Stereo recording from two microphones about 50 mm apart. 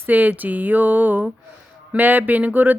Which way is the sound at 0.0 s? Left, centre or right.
Right.